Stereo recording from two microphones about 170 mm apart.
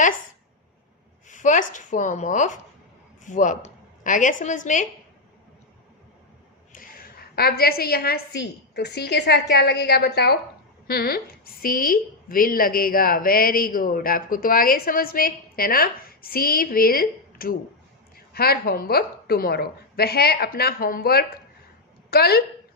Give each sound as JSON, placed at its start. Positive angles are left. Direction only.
{"t": 1.3, "sound": "a woman's voice", "side_deg": 50}
{"t": 6.7, "sound": "a woman's voice", "side_deg": 60}